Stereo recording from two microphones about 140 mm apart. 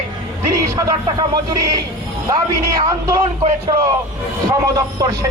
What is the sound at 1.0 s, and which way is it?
A man's voice, 25° right (ahead or behind).